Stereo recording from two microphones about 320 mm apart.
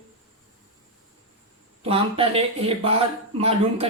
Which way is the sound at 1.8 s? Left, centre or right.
Centre.